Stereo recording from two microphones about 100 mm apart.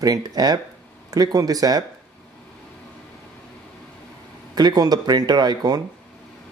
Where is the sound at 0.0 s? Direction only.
40° right (ahead or behind).